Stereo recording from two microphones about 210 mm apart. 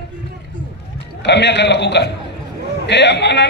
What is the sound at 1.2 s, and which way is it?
A man's voice, 55° left (ahead or behind).